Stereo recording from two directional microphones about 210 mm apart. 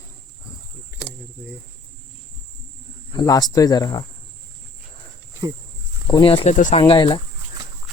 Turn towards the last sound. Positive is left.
turn(degrees=25)  # may be behind; listen again after turning